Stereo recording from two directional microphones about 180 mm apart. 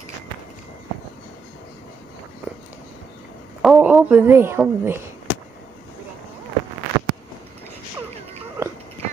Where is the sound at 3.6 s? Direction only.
5° right (ahead or behind).